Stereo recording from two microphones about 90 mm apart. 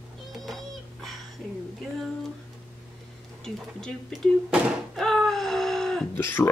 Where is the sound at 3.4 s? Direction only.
5° left (ahead or behind).